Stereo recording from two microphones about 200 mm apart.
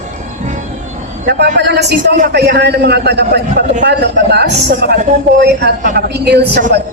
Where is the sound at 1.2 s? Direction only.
55° right (ahead or behind).